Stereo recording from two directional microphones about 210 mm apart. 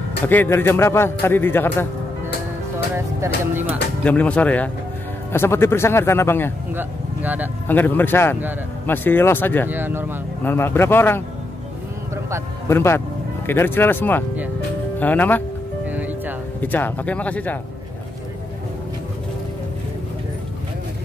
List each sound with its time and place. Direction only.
0.3 s speech: 10° left (ahead or behind)
4.0 s speech: 5° left (ahead or behind)
6.7 s speech: 10° right (ahead or behind)
7.6 s speech: 10° left (ahead or behind)
9.7 s speech: 10° right (ahead or behind)
10.4 s speech: 10° left (ahead or behind)
12.6 s speech: 10° left (ahead or behind)
15.9 s music: 10° right (ahead or behind)
16.6 s speech: 10° left (ahead or behind)